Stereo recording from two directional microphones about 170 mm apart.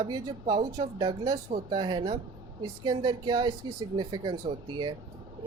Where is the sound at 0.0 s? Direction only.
25° right (ahead or behind).